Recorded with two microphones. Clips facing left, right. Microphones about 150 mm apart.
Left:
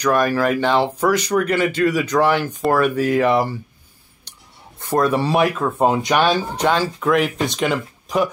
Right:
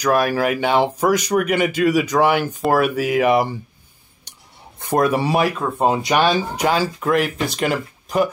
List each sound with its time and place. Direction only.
0.0 s speech: 10° right (ahead or behind)
4.7 s speech: 15° right (ahead or behind)